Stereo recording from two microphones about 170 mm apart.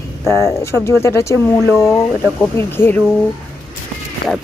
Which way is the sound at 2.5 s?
15° left (ahead or behind).